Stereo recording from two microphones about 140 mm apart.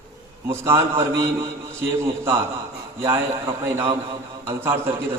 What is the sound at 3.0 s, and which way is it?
A man's voice, 20° right (ahead or behind).